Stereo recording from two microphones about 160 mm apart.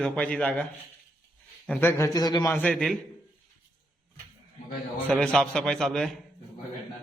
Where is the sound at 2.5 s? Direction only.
10° left (ahead or behind).